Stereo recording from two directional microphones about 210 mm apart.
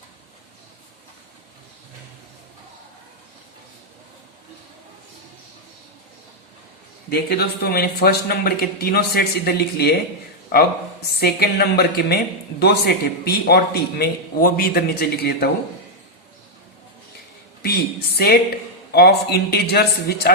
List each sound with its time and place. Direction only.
7.1 s a woman's voice: 50° left (ahead or behind)
17.6 s a woman's voice: 50° left (ahead or behind)